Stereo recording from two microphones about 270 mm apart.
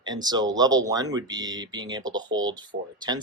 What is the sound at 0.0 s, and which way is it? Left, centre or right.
Speech, centre.